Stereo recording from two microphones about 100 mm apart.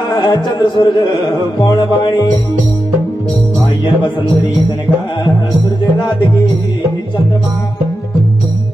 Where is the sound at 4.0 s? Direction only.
50° left (ahead or behind).